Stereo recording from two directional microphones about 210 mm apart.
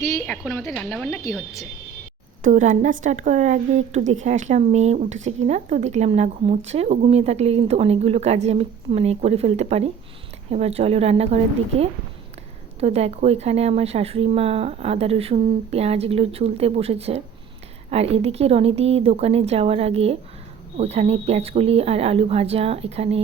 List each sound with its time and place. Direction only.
0.0 s speech: 15° left (ahead or behind)
2.4 s a woman's voice: 35° right (ahead or behind)